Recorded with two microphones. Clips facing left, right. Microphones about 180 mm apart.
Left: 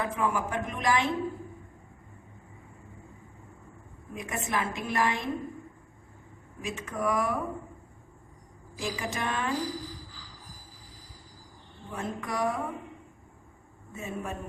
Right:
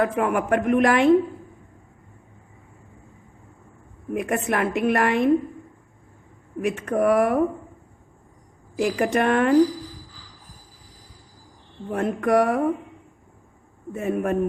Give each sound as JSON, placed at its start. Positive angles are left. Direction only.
{"t": 0.0, "sound": "a woman's voice", "side_deg": -65}
{"t": 4.1, "sound": "a woman's voice", "side_deg": -65}
{"t": 6.6, "sound": "a woman's voice", "side_deg": -60}
{"t": 8.7, "sound": "a woman's voice", "side_deg": -65}
{"t": 11.9, "sound": "a woman's voice", "side_deg": -65}
{"t": 13.9, "sound": "a woman's voice", "side_deg": -65}